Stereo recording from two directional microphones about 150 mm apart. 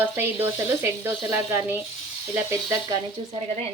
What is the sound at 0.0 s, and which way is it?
Speech, 15° right (ahead or behind).